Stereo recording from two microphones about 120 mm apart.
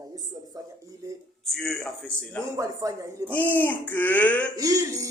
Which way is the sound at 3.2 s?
10° left (ahead or behind).